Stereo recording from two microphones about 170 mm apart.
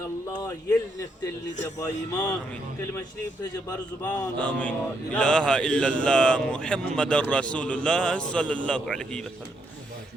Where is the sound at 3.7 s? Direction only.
20° left (ahead or behind).